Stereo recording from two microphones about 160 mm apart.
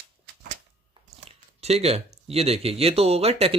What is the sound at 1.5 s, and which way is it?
Speech, 40° right (ahead or behind).